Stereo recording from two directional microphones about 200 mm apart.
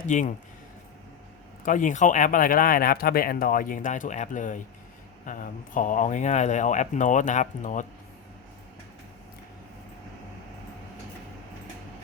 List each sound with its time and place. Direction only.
0.1 s speech: 35° left (ahead or behind)
1.6 s speech: 40° left (ahead or behind)